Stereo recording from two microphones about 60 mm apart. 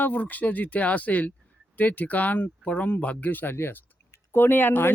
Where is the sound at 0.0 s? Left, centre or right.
Left.